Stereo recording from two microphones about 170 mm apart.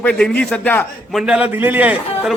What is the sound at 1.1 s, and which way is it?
A man's voice, 5° right (ahead or behind).